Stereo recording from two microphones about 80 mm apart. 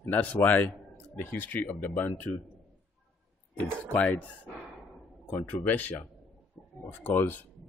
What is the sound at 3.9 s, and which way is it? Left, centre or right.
Speech, centre.